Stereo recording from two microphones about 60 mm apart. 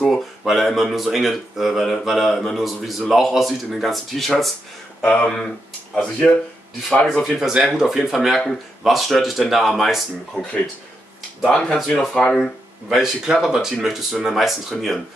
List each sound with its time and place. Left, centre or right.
0.0 s speech: centre
5.1 s speech: centre
7.3 s speech: centre
10.3 s speech: centre
12.9 s speech: centre